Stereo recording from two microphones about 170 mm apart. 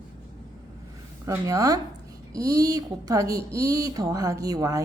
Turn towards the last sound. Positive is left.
turn(degrees=-20)  # may be behind; listen again after turning